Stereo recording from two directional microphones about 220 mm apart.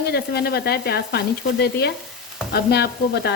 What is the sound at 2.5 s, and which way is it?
Speech, 50° left (ahead or behind).